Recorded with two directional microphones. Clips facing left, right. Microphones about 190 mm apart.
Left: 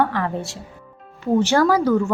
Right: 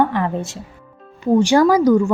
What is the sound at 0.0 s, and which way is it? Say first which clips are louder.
A woman's voice: right 3 dB; 20° right (ahead or behind).